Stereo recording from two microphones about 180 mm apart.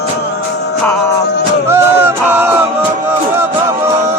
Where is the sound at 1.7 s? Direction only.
10° right (ahead or behind).